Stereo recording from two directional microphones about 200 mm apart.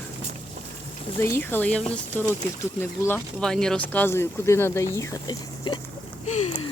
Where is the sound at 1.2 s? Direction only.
10° left (ahead or behind).